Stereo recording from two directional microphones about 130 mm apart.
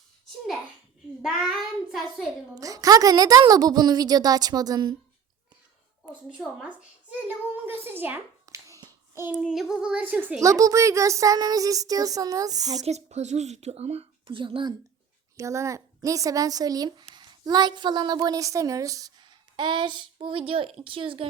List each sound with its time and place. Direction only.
1.2 s a child's voice: 5° right (ahead or behind)
2.6 s a woman's voice: 25° right (ahead or behind)
6.6 s a child's voice: 10° right (ahead or behind)
10.4 s a woman's voice: 25° right (ahead or behind)
12.8 s a woman's voice: 60° right (ahead or behind); by 14.8 s 40° right (ahead or behind)
15.4 s a child's voice: 25° right (ahead or behind); by 21.2 s 45° right (ahead or behind)